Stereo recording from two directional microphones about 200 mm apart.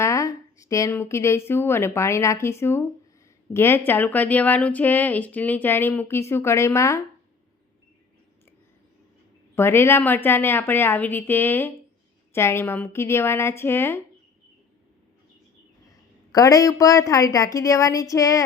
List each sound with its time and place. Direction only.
0.0 s speech: 15° left (ahead or behind)
9.6 s speech: 10° left (ahead or behind)
15.9 s speech: 15° left (ahead or behind)